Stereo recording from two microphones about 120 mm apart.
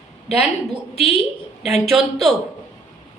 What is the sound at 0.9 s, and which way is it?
Speech, 55° left (ahead or behind).